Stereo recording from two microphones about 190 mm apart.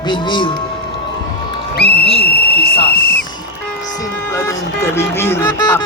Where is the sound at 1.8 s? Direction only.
60° left (ahead or behind).